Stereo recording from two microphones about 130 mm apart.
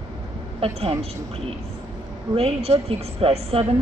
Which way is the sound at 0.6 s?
50° right (ahead or behind).